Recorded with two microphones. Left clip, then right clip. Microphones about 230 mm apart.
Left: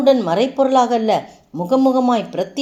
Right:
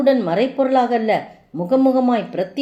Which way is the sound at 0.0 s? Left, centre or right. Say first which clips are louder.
Left 2 dB; left.